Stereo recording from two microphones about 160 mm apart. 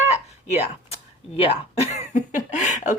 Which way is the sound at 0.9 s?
40° left (ahead or behind).